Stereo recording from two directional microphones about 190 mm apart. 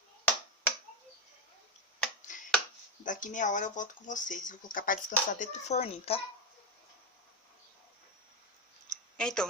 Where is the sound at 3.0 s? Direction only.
45° left (ahead or behind).